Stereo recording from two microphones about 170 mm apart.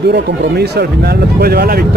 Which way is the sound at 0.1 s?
70° right (ahead or behind).